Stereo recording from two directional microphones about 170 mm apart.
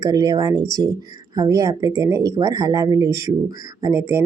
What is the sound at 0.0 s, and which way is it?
A woman's voice, 25° right (ahead or behind).